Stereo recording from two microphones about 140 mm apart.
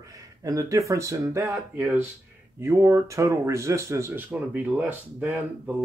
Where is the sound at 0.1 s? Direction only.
25° right (ahead or behind).